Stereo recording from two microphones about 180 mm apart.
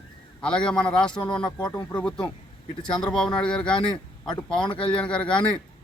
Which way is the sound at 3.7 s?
25° left (ahead or behind).